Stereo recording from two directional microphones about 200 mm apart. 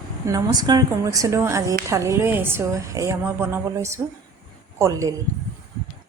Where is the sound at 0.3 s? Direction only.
20° right (ahead or behind).